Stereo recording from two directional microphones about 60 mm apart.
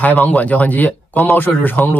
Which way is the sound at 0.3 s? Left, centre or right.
Left.